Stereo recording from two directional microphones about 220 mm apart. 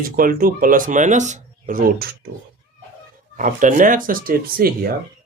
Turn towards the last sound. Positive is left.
turn(degrees=-40)  # may be behind; listen again after turning